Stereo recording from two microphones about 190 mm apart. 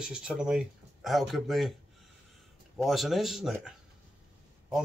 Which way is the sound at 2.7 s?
Centre (ahead or behind).